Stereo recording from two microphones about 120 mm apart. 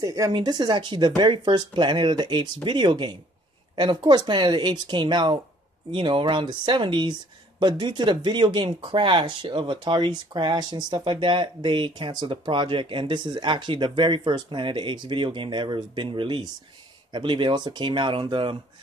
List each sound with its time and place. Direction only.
0.0 s speech: 30° right (ahead or behind)